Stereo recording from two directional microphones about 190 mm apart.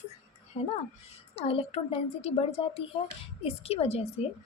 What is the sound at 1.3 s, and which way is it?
A woman's voice, 30° left (ahead or behind).